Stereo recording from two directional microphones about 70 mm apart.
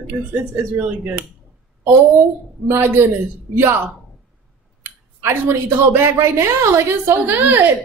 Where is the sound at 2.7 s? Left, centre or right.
Right.